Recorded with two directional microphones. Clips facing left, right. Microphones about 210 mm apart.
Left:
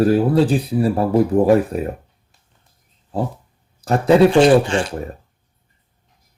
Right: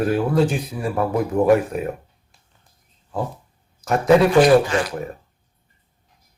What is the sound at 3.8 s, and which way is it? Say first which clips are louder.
Speech: left 2 dB; 30° left (ahead or behind).